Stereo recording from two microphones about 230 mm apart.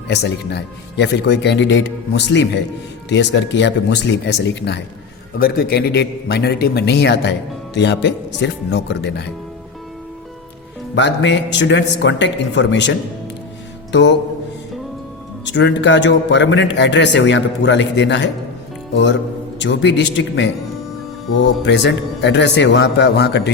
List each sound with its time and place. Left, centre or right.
0.1 s speech: left
10.9 s speech: left
13.9 s speech: left
15.4 s speech: left
19.5 s speech: left